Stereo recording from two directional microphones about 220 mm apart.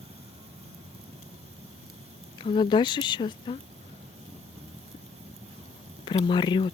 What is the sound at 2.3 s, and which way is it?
Speech, 20° left (ahead or behind).